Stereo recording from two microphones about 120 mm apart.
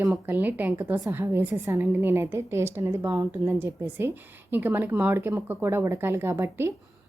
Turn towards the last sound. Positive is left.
turn(degrees=-25)  # may be behind; listen again after turning